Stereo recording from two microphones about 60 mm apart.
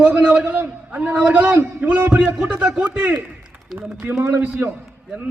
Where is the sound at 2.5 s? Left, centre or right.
Centre.